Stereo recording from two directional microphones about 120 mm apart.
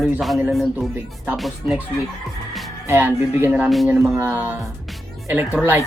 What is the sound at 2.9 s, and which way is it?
Speech, 15° right (ahead or behind).